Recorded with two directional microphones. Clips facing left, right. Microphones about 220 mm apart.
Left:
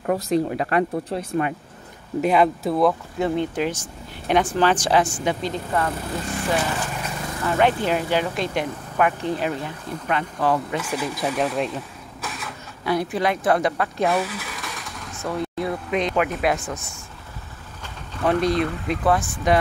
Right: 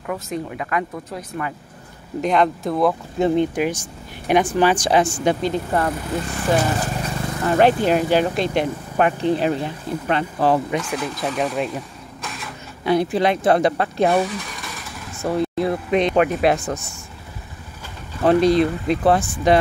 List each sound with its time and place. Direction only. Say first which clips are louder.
0.0 s speech: left 6 dB; 35° left (ahead or behind)
2.2 s speech: even; 5° left (ahead or behind)
3.2 s speech: right 8 dB; 20° right (ahead or behind)
5.2 s speech: right 5 dB; 35° right (ahead or behind)
10.8 s speech: right 1 dB; 5° left (ahead or behind)
12.8 s speech: right 4 dB; 25° right (ahead or behind)
14.2 s vehicle: right 4 dB; 5° left (ahead or behind)
15.2 s speech: right 5 dB; 30° right (ahead or behind)
18.2 s speech: right 5 dB; 30° right (ahead or behind)